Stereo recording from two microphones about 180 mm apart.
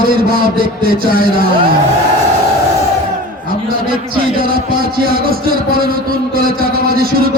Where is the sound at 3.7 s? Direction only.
55° right (ahead or behind).